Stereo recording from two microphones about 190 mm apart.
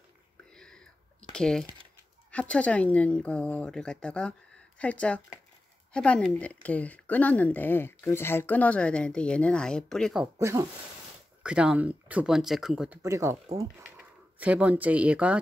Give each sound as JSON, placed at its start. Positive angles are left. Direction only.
{"t": 0.5, "sound": "whispering", "side_deg": 5}
{"t": 1.3, "sound": "speech", "side_deg": 5}
{"t": 10.4, "sound": "speech", "side_deg": -15}
{"t": 11.4, "sound": "speech", "side_deg": -5}
{"t": 13.0, "sound": "speech", "side_deg": -15}